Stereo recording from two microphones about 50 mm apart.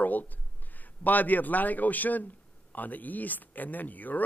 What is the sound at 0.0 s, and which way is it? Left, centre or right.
Speech, left.